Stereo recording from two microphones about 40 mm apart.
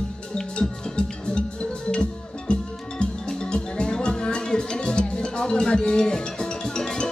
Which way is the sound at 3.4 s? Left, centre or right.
Left.